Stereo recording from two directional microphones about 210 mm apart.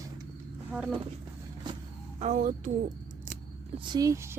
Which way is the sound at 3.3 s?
40° right (ahead or behind).